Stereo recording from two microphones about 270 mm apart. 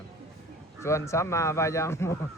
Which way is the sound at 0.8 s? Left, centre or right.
Centre.